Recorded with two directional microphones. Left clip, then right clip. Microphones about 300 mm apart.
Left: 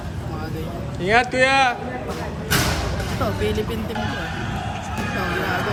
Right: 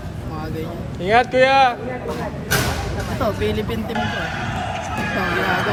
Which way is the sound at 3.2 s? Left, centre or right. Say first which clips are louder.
Right 2 dB; right.